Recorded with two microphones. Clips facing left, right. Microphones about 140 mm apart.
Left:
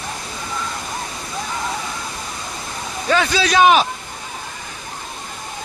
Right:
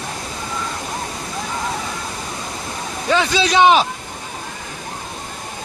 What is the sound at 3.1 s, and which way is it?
Speech, 20° right (ahead or behind).